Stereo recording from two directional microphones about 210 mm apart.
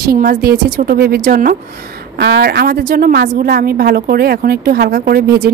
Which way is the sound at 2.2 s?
50° right (ahead or behind).